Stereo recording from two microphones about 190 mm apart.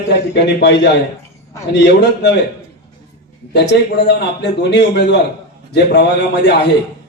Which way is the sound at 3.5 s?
65° left (ahead or behind).